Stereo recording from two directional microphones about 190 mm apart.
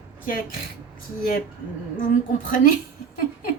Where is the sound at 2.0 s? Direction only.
45° left (ahead or behind).